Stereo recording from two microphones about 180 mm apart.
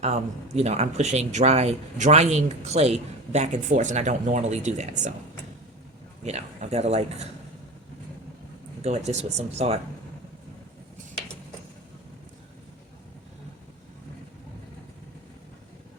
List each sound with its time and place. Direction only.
0.0 s speech: 35° right (ahead or behind)
6.2 s speech: 35° right (ahead or behind)
8.8 s speech: 35° right (ahead or behind)